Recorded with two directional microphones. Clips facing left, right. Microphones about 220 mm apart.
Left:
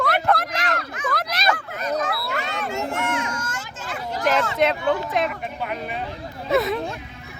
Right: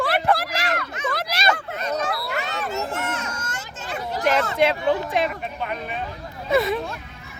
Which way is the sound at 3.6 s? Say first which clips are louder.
Right 1 dB; 25° right (ahead or behind).